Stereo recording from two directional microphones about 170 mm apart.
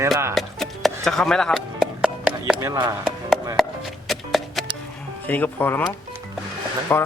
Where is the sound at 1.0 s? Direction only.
5° left (ahead or behind).